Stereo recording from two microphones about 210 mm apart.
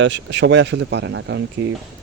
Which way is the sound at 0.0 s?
60° right (ahead or behind).